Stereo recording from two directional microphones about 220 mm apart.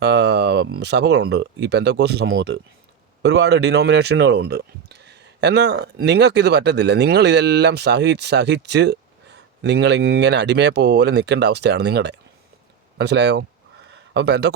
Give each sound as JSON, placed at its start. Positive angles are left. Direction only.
{"t": 0.0, "sound": "speech", "side_deg": -50}